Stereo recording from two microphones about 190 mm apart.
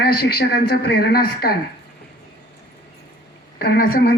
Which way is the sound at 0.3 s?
55° left (ahead or behind).